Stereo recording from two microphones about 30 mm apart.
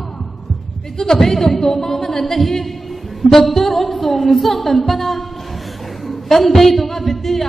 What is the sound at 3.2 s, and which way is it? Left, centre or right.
Music, centre.